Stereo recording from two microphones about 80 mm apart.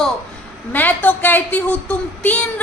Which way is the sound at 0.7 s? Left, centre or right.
Left.